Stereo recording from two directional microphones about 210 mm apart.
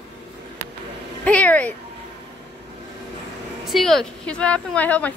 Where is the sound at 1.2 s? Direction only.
5° left (ahead or behind).